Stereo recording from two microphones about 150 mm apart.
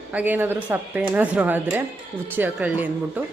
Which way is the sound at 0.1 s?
10° right (ahead or behind).